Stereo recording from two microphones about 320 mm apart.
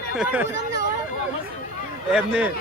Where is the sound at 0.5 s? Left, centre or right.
Left.